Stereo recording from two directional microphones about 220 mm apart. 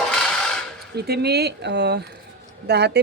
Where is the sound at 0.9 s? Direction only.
45° right (ahead or behind).